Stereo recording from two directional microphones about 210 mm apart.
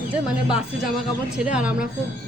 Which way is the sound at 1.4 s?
5° right (ahead or behind).